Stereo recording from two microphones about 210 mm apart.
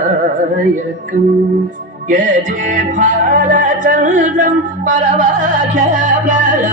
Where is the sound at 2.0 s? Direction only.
35° right (ahead or behind).